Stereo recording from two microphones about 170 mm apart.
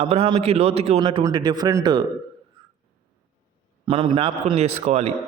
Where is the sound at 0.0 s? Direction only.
30° right (ahead or behind).